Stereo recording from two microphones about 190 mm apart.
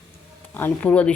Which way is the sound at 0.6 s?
10° left (ahead or behind).